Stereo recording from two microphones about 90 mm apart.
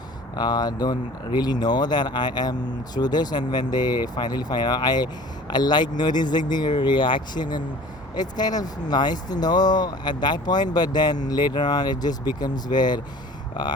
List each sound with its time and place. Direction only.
0.3 s speech: 50° left (ahead or behind)